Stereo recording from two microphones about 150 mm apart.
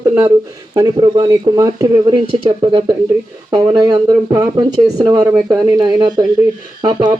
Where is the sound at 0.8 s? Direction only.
30° right (ahead or behind).